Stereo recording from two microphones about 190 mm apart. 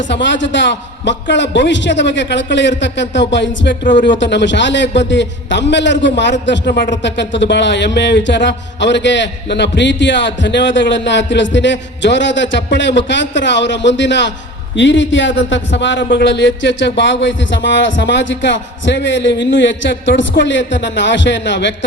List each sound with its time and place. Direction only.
0.1 s speech: 70° left (ahead or behind)